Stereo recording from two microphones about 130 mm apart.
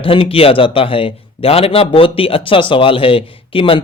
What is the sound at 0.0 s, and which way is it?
A man's voice, 45° left (ahead or behind).